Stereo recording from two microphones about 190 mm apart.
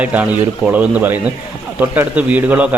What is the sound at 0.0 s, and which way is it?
A man's voice, 5° right (ahead or behind).